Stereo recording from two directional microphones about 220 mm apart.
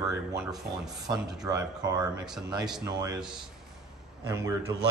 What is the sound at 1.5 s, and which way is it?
Speech, 15° right (ahead or behind).